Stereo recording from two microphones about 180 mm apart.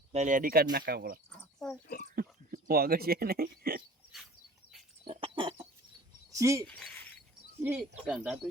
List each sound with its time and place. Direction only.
0.1 s speech: 40° right (ahead or behind); by 1.2 s 60° right (ahead or behind)
1.3 s a sound: 5° left (ahead or behind)
2.0 s speech: 55° right (ahead or behind)
5.0 s chicken: 30° right (ahead or behind)
6.3 s speech: 15° right (ahead or behind)
6.7 s cricket: 5° left (ahead or behind)
7.6 s speech: 10° right (ahead or behind)